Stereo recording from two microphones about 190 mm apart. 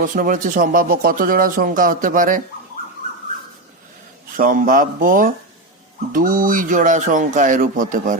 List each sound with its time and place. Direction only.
0.0 s speech: 45° right (ahead or behind)
4.4 s speech: 45° right (ahead or behind)